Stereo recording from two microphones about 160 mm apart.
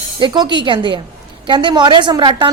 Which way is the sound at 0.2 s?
30° right (ahead or behind).